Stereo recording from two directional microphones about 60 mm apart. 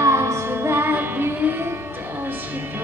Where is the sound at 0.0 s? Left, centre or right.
Right.